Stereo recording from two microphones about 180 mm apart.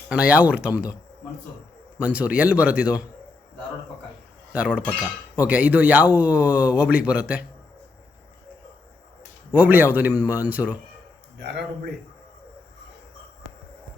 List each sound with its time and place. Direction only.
0.1 s speech: 5° right (ahead or behind)
2.0 s speech: 5° right (ahead or behind)
4.5 s speech: 5° right (ahead or behind)
9.5 s speech: 10° right (ahead or behind)
11.3 s a man's voice: 70° right (ahead or behind)